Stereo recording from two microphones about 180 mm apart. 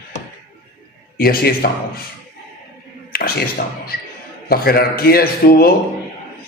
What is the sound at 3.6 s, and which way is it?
A man's voice, 60° left (ahead or behind).